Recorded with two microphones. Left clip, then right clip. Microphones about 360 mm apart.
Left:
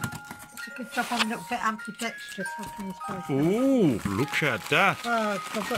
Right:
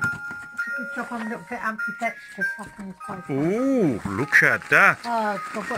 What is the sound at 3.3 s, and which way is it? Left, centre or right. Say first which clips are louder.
Speech: right 1 dB; centre.